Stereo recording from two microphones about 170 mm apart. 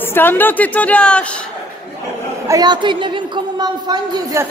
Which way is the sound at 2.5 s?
25° right (ahead or behind).